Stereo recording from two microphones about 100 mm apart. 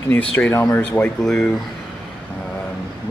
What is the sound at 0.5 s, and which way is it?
Speech, 30° left (ahead or behind).